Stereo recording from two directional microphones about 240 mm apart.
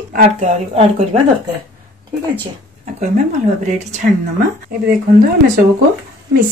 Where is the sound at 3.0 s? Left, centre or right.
Right.